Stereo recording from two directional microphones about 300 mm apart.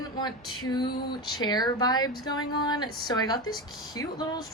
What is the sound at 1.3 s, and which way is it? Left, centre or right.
A woman's voice, centre.